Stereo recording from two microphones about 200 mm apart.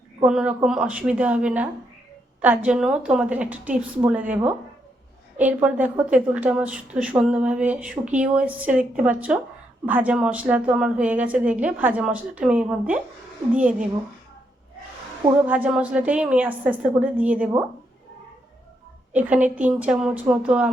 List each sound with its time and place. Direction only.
0.3 s a woman's voice: 5° right (ahead or behind)
15.4 s a woman's voice: 5° right (ahead or behind)
19.1 s a woman's voice: 5° right (ahead or behind)